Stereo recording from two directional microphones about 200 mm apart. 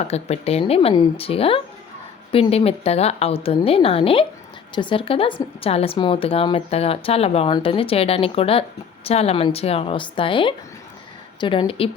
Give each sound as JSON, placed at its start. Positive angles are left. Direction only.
{"t": 0.0, "sound": "a woman's voice", "side_deg": 30}